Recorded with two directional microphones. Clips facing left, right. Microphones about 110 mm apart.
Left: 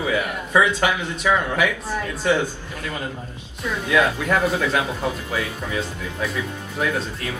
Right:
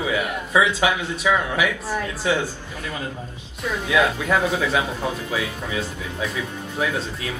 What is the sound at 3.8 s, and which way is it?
Speech, 10° right (ahead or behind).